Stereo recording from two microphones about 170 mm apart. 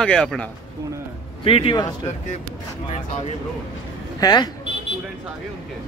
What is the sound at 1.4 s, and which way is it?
Speech, 35° left (ahead or behind).